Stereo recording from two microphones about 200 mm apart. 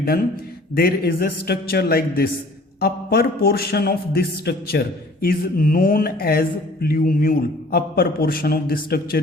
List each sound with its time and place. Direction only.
0.8 s a man's voice: 50° left (ahead or behind)